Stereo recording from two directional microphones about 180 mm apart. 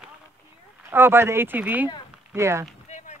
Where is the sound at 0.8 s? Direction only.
15° right (ahead or behind).